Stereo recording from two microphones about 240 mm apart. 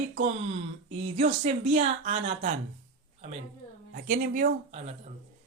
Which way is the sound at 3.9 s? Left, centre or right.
Right.